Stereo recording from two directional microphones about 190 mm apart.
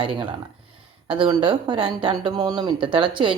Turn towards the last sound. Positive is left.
turn(degrees=-25)  # may be behind; listen again after turning